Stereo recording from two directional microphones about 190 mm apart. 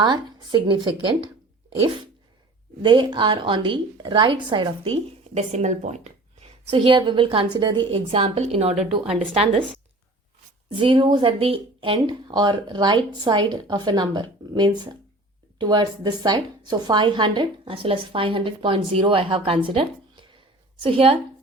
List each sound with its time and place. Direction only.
0.0 s a woman's voice: 25° right (ahead or behind)
2.8 s a woman's voice: 25° right (ahead or behind)
10.8 s a woman's voice: 25° right (ahead or behind)